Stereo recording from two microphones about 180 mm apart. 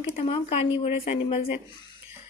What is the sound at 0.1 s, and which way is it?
Speech, 35° left (ahead or behind).